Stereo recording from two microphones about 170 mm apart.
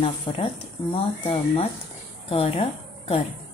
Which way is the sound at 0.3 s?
25° left (ahead or behind).